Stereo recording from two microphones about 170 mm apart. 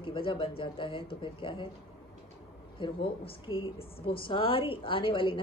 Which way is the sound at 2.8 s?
30° left (ahead or behind).